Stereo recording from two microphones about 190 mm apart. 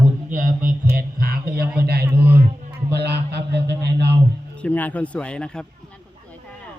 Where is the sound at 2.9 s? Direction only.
60° right (ahead or behind).